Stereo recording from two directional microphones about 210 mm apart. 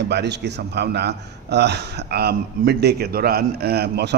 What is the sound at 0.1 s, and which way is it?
A man's voice, 55° right (ahead or behind).